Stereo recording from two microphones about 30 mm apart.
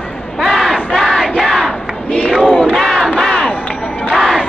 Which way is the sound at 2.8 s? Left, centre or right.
Centre.